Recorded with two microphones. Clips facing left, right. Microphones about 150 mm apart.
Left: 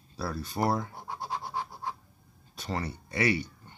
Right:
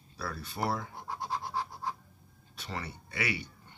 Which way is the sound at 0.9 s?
5° left (ahead or behind).